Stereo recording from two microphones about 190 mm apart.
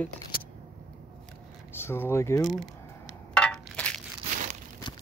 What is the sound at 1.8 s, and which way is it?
Speech, 10° left (ahead or behind).